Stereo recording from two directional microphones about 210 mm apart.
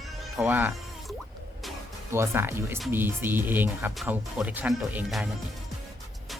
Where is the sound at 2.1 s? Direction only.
10° right (ahead or behind).